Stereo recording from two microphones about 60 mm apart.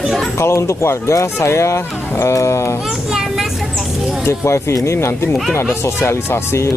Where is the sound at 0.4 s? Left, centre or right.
Left.